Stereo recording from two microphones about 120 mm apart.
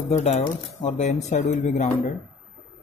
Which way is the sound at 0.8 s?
75° left (ahead or behind).